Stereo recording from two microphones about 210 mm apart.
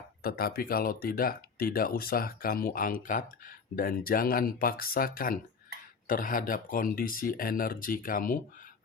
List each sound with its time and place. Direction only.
0.2 s speech: 45° left (ahead or behind)